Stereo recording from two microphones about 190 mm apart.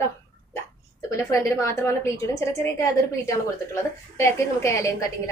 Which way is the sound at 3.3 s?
15° left (ahead or behind).